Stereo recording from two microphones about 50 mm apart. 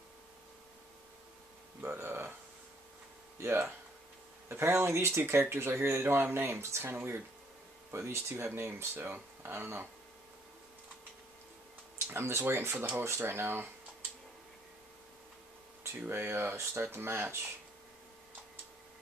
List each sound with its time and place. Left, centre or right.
2.0 s a sound: right
3.3 s speech: right
8.9 s speech: right
12.1 s speech: right
16.1 s speech: right